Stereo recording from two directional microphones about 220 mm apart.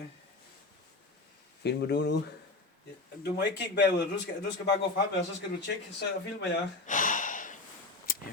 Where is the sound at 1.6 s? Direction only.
50° left (ahead or behind).